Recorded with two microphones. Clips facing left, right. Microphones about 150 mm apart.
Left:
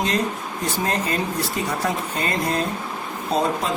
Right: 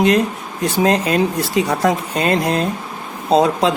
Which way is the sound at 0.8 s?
80° right.